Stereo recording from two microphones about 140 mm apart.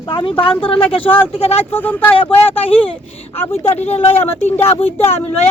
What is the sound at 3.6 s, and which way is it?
Speech, 50° left (ahead or behind).